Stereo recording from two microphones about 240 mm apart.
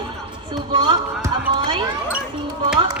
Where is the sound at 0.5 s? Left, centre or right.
Centre.